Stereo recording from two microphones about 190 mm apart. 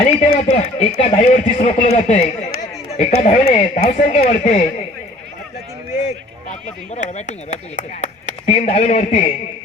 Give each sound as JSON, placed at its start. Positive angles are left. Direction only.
{"t": 0.2, "sound": "speech", "side_deg": 35}
{"t": 6.1, "sound": "a man's voice", "side_deg": 35}